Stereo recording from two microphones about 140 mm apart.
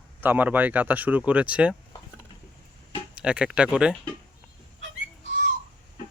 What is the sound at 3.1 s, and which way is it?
Speech, 5° right (ahead or behind).